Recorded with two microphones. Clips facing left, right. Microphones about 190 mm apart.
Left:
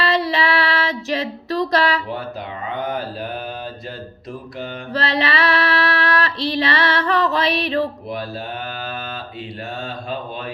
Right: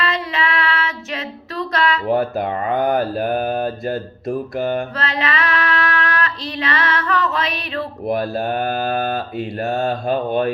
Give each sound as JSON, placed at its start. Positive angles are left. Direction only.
{"t": 0.0, "sound": "child singing", "side_deg": 35}
{"t": 2.0, "sound": "speech", "side_deg": -55}
{"t": 4.9, "sound": "female singing", "side_deg": 35}
{"t": 8.0, "sound": "speech", "side_deg": -50}